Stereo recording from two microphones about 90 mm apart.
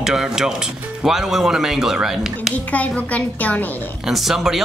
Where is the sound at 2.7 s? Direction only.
15° left (ahead or behind).